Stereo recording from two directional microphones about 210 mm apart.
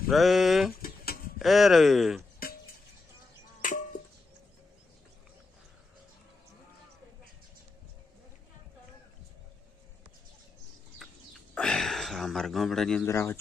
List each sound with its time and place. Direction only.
0.1 s speech: centre (ahead or behind)
0.8 s pigeon: 45° left (ahead or behind)
1.4 s speech: centre (ahead or behind)
3.6 s a sound: 40° left (ahead or behind)
11.5 s a sound: 5° left (ahead or behind)
13.1 s speech: 15° left (ahead or behind)